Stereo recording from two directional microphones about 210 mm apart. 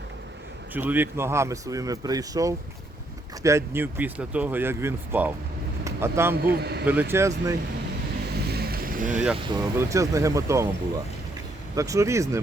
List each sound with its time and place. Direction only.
0.7 s a man's voice: 10° right (ahead or behind)
5.8 s vehicle: 10° right (ahead or behind)
6.3 s a man's voice: 50° right (ahead or behind)
7.1 s a man's voice: 15° right (ahead or behind)
8.4 s vehicle: 50° right (ahead or behind)
9.5 s a man's voice: 15° right (ahead or behind)
11.7 s a man's voice: 15° right (ahead or behind)